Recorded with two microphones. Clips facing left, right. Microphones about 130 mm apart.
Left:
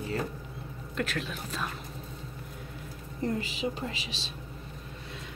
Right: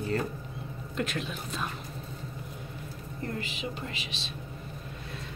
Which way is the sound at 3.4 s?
35° left (ahead or behind).